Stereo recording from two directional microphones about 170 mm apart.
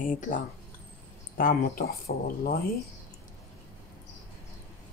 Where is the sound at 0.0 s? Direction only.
50° left (ahead or behind).